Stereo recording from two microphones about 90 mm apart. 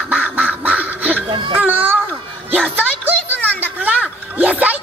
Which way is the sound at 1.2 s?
65° right (ahead or behind).